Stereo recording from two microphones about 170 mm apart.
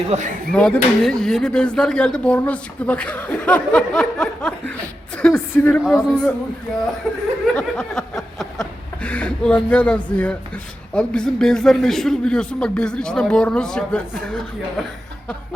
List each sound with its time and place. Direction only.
0.1 s speech: 40° right (ahead or behind)
0.5 s a man's voice: 5° left (ahead or behind)
7.5 s a sound: 5° left (ahead or behind)
9.6 s a man's voice: 5° left (ahead or behind)